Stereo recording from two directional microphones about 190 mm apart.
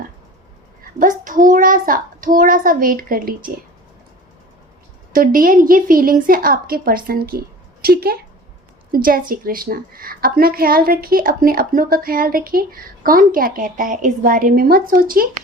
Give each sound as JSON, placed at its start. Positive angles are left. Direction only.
{"t": 0.9, "sound": "a child's voice", "side_deg": -45}
{"t": 5.1, "sound": "a woman's voice", "side_deg": -45}